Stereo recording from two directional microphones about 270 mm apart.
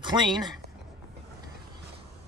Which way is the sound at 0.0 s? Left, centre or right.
Centre.